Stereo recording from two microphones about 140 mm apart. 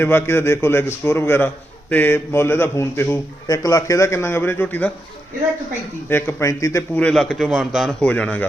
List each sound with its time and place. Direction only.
0.0 s a man's voice: 15° left (ahead or behind)
6.1 s speech: 15° left (ahead or behind)
6.9 s a man's voice: 5° left (ahead or behind)